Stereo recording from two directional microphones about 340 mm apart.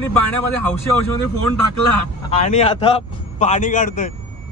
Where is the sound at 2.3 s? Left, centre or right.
Centre.